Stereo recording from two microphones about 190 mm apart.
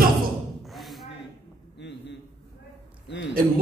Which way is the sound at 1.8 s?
65° left (ahead or behind).